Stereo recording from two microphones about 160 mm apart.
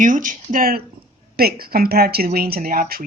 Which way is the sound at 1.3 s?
75° right (ahead or behind).